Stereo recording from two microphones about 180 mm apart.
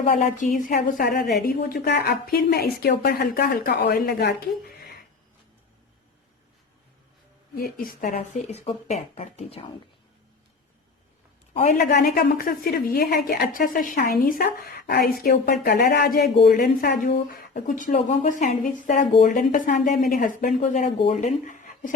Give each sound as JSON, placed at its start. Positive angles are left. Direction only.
{"t": 0.0, "sound": "a woman's voice", "side_deg": 45}
{"t": 7.5, "sound": "speech", "side_deg": 55}
{"t": 8.4, "sound": "speech", "side_deg": 35}
{"t": 11.5, "sound": "speech", "side_deg": 45}
{"t": 11.9, "sound": "a woman's voice", "side_deg": 60}
{"t": 17.1, "sound": "speech", "side_deg": 50}